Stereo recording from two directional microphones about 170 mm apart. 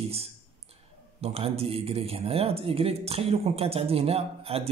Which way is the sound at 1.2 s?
35° right (ahead or behind).